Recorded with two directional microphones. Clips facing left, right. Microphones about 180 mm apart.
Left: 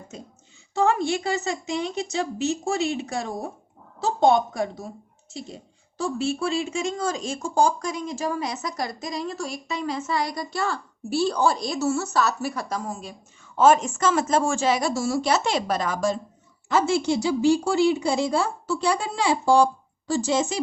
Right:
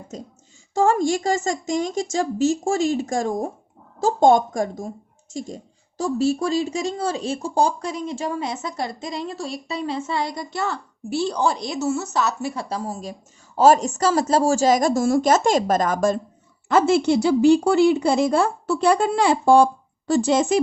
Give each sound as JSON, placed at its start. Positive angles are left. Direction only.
{"t": 0.1, "sound": "a woman's voice", "side_deg": -40}